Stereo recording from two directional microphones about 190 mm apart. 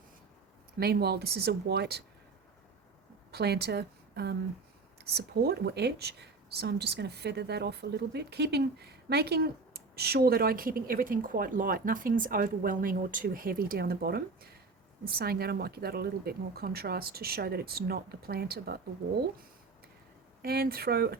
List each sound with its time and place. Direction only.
0.8 s speech: 55° right (ahead or behind)
3.3 s a woman's voice: 60° right (ahead or behind)
20.4 s speech: 55° right (ahead or behind)